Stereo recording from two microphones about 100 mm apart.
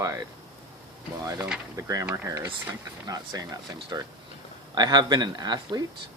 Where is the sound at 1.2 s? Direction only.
30° right (ahead or behind).